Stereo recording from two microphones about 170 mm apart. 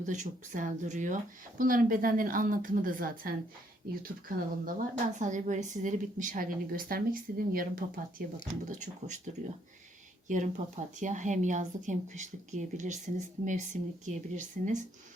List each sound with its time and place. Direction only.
0.0 s a woman's voice: 45° right (ahead or behind)
8.7 s a woman's voice: 45° right (ahead or behind)